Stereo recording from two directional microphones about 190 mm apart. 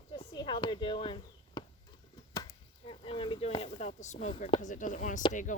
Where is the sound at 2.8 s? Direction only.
30° left (ahead or behind).